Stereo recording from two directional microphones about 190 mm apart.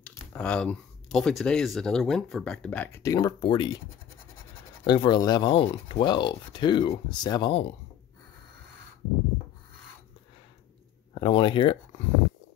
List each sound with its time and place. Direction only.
0.0 s speech: 5° left (ahead or behind); by 3.8 s 25° left (ahead or behind)
4.8 s speech: 25° left (ahead or behind)
11.1 s speech: 25° left (ahead or behind)